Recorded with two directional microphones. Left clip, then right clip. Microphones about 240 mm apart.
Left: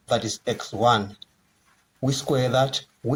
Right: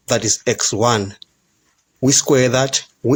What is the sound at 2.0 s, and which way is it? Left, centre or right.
Speech, right.